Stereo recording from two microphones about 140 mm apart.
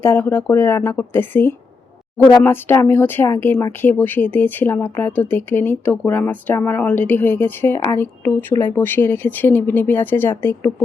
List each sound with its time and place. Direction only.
0.0 s speech: 15° left (ahead or behind)